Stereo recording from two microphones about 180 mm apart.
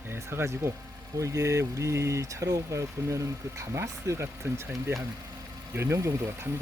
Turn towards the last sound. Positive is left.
turn(degrees=-15)  # may be behind; listen again after turning